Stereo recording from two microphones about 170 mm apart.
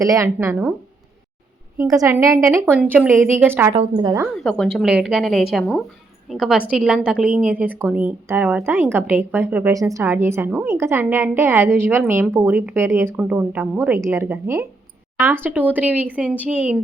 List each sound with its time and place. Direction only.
0.0 s speech: 20° right (ahead or behind)
1.8 s a woman's voice: 15° right (ahead or behind)
3.8 s speech: 25° right (ahead or behind)
4.4 s a woman's voice: centre (ahead or behind)